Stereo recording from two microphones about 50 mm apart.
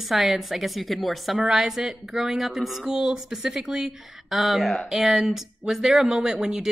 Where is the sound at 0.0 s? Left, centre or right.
Centre.